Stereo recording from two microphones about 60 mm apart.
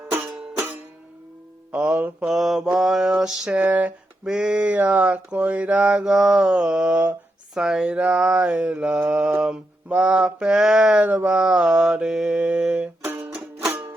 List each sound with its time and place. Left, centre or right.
1.7 s mantra: right
2.2 s mantra: centre
3.5 s mantra: right
4.3 s mantra: centre
11.0 s mantra: right